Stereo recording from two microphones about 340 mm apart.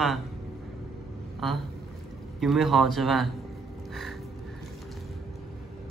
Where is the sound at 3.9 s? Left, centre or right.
Centre.